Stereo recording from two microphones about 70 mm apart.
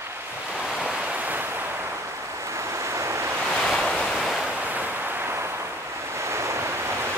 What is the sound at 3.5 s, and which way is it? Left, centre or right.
Waves, centre.